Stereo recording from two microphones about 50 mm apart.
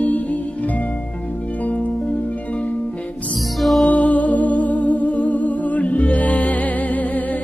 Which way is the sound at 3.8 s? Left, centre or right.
Left.